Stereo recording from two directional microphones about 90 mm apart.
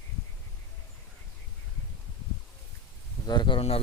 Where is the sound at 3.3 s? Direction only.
60° left (ahead or behind).